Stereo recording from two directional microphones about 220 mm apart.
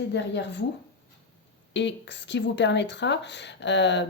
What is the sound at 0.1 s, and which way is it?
Speech, 50° left (ahead or behind).